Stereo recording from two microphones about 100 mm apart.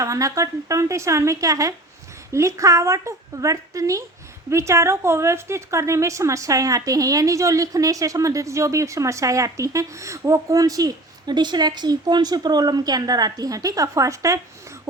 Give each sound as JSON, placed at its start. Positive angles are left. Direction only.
{"t": 0.0, "sound": "a woman's voice", "side_deg": -30}